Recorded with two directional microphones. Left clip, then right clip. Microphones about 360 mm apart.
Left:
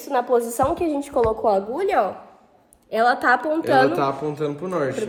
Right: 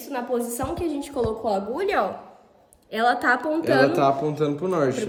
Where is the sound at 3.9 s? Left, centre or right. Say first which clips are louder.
Right 2 dB; centre.